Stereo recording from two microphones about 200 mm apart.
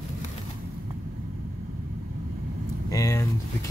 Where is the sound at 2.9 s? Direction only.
15° left (ahead or behind).